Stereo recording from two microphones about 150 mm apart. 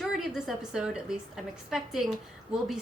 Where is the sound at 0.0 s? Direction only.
Centre (ahead or behind).